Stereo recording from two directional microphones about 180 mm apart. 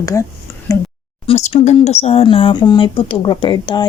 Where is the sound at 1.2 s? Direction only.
35° left (ahead or behind).